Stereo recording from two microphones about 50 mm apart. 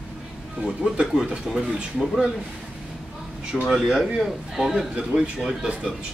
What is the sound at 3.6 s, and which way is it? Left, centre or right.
A man's voice, centre.